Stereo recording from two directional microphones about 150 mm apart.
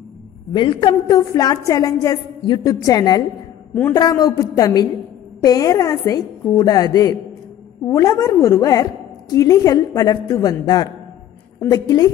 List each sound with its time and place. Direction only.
0.6 s a woman's voice: 35° left (ahead or behind)